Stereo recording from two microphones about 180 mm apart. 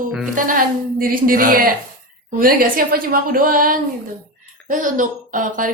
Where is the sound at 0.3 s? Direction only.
50° right (ahead or behind).